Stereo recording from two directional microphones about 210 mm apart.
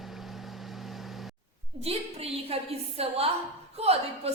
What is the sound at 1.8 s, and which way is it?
A woman's voice, 30° right (ahead or behind).